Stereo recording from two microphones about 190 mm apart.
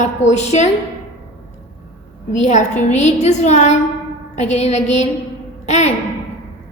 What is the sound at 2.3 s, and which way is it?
A woman's voice, 40° left (ahead or behind).